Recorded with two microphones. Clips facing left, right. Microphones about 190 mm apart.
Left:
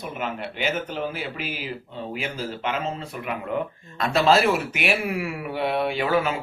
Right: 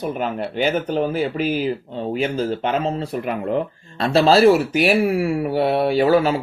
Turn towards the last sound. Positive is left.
turn(degrees=-35)  # may be behind; listen again after turning